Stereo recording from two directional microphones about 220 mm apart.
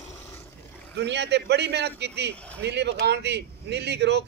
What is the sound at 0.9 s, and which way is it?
A man's voice, 50° right (ahead or behind).